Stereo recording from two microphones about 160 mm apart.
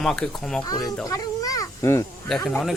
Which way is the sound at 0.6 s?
25° left (ahead or behind).